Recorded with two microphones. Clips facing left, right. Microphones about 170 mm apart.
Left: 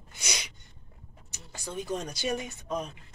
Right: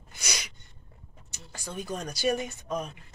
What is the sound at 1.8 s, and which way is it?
Speech, 20° left (ahead or behind).